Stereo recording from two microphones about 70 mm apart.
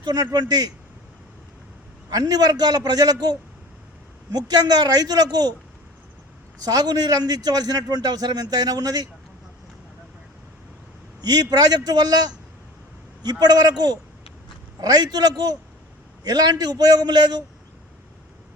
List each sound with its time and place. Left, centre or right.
0.0 s a man's voice: right
2.0 s a man's voice: right
6.6 s a man's voice: right
11.2 s a man's voice: right
13.4 s a man's voice: right